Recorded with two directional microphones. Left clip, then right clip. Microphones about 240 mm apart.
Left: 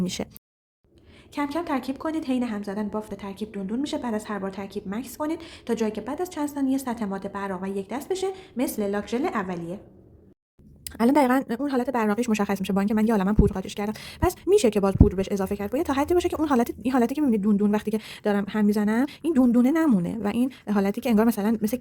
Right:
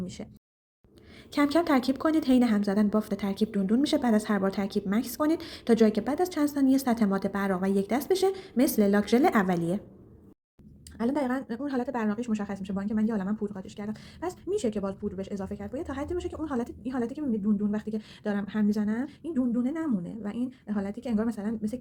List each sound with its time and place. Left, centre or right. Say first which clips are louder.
0.0 s speech: left 10 dB; left
1.3 s a woman's voice: right 3 dB; centre
10.8 s speech: left 9 dB; left